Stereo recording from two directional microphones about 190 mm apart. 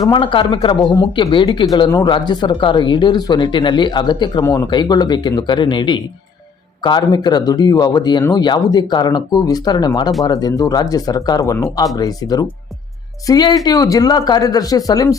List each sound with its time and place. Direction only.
0.0 s speech: 25° left (ahead or behind)